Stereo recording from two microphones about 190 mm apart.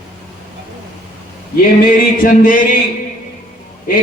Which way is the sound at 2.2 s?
45° left (ahead or behind).